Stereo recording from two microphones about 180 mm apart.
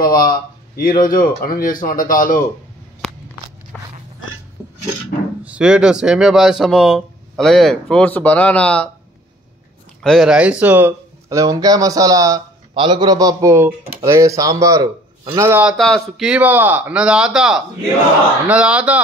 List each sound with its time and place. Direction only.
0.0 s speech: 55° left (ahead or behind)
3.0 s a sound: centre (ahead or behind)
3.7 s biting: 5° left (ahead or behind)
5.4 s speech: 5° right (ahead or behind)
10.0 s speech: centre (ahead or behind)
15.8 s speech: centre (ahead or behind)